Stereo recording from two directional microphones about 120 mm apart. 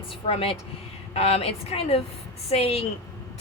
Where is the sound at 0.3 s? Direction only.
50° left (ahead or behind).